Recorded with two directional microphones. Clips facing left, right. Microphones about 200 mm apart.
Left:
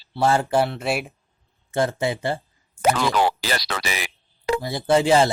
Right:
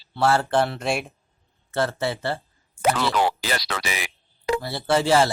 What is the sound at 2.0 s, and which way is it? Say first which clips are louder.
Speech: left 2 dB; 15° left (ahead or behind).